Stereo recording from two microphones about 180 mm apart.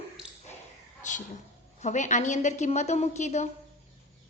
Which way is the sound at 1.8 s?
40° left (ahead or behind).